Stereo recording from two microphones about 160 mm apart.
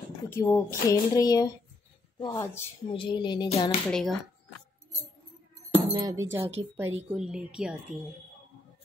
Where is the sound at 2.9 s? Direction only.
30° left (ahead or behind).